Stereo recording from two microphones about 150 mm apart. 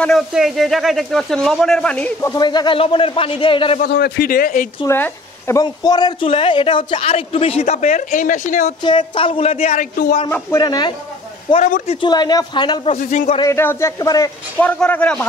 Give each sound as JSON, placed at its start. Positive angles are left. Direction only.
{"t": 0.0, "sound": "a man's voice", "side_deg": 0}
{"t": 2.2, "sound": "a man's voice", "side_deg": 25}
{"t": 3.8, "sound": "speech", "side_deg": 85}
{"t": 4.8, "sound": "speech", "side_deg": 15}
{"t": 5.6, "sound": "a man's voice", "side_deg": 25}
{"t": 8.1, "sound": "speech", "side_deg": 60}
{"t": 8.8, "sound": "a man's voice", "side_deg": 35}
{"t": 9.8, "sound": "speech", "side_deg": 60}
{"t": 10.6, "sound": "speech", "side_deg": 30}
{"t": 11.5, "sound": "speech", "side_deg": 45}
{"t": 12.0, "sound": "speech", "side_deg": 30}
{"t": 12.8, "sound": "speech", "side_deg": 45}
{"t": 13.4, "sound": "speech", "side_deg": 15}
{"t": 14.6, "sound": "a man's voice", "side_deg": 10}